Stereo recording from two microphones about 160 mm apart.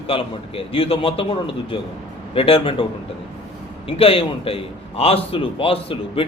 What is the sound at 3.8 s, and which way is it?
A man's voice, 35° left (ahead or behind).